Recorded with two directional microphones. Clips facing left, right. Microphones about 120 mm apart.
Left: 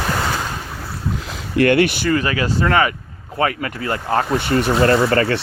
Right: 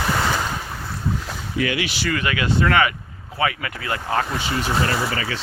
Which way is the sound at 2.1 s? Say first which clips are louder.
Left 4 dB; 35° left (ahead or behind).